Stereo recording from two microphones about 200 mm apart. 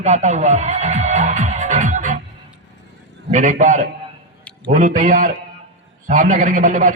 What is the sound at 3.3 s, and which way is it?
A man's voice, 35° right (ahead or behind).